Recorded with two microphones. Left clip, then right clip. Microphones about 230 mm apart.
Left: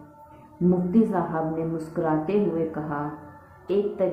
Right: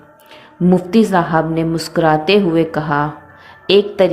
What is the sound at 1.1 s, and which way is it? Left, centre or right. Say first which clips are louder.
Speech: right 11 dB; right.